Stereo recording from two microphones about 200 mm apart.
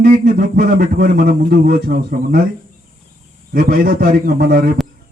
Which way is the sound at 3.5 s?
50° right (ahead or behind).